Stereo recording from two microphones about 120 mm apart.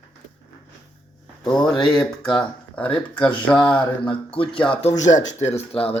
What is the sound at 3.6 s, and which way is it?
Mantra, 40° left (ahead or behind).